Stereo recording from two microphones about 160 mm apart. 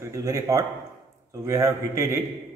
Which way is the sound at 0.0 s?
20° right (ahead or behind).